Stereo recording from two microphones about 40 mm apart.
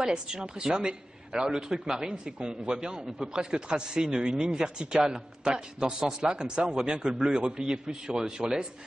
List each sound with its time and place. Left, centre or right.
0.0 s a man's voice: centre